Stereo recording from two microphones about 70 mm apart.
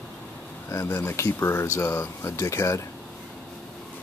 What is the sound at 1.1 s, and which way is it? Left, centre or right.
Speech, left.